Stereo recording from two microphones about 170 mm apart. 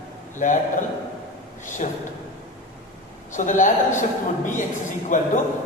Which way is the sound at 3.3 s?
50° left (ahead or behind).